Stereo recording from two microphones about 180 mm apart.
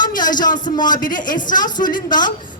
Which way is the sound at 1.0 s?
50° left (ahead or behind).